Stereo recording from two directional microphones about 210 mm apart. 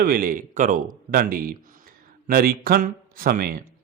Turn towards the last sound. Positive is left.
turn(degrees=-45)  # may be behind; listen again after turning